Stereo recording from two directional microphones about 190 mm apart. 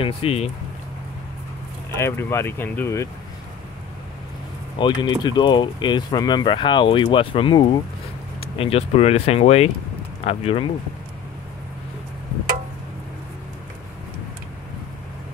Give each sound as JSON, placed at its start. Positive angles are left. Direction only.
{"t": 0.0, "sound": "speech", "side_deg": 30}
{"t": 2.0, "sound": "speech", "side_deg": 10}
{"t": 4.7, "sound": "speech", "side_deg": 25}